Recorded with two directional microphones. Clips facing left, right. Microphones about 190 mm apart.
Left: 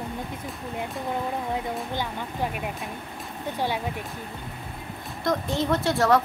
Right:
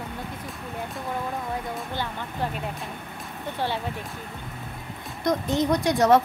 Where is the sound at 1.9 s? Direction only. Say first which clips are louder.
Left 1 dB; 15° left (ahead or behind).